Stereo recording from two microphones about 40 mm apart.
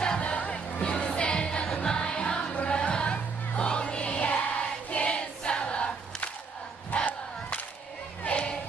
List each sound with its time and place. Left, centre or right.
0.2 s music: left
6.9 s battle cry: left